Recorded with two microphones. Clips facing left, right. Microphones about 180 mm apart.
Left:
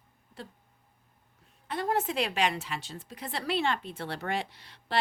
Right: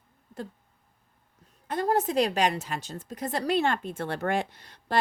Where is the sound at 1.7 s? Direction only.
40° right (ahead or behind).